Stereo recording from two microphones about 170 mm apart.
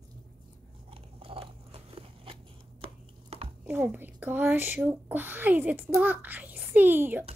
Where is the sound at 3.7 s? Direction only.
10° right (ahead or behind).